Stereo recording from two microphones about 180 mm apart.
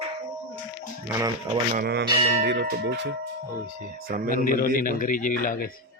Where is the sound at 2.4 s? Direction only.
65° right (ahead or behind).